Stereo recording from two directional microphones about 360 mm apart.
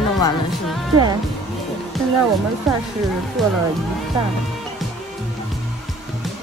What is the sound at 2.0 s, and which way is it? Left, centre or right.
Music, centre.